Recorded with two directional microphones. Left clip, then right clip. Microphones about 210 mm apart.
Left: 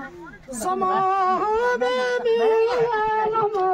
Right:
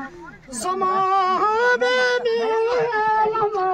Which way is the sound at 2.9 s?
10° right (ahead or behind).